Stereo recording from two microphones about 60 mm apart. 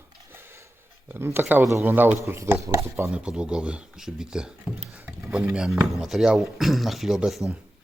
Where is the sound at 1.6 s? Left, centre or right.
Right.